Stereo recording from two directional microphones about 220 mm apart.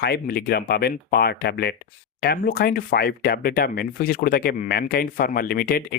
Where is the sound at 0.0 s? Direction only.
45° left (ahead or behind).